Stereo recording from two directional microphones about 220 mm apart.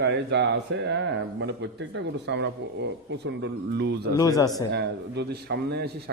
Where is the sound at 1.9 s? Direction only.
55° right (ahead or behind).